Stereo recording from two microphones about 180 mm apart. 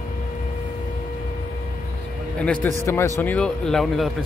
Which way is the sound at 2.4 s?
5° left (ahead or behind).